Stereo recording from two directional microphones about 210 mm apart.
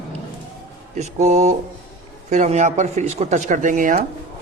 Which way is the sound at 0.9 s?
35° right (ahead or behind).